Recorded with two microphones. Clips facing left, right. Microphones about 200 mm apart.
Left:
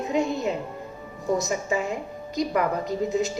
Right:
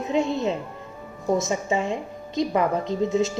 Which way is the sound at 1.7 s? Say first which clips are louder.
Right 2 dB; 25° right (ahead or behind).